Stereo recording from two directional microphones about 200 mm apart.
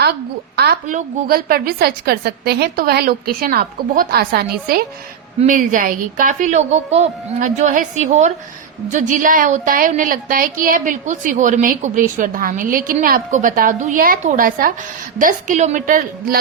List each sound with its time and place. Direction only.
0.0 s a woman's voice: 55° right (ahead or behind)
0.9 s a woman's voice: 45° right (ahead or behind)